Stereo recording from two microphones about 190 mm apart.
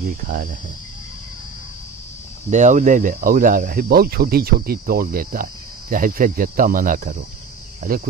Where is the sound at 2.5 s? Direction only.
40° right (ahead or behind).